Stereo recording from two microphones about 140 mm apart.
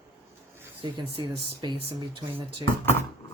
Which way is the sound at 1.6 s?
35° right (ahead or behind).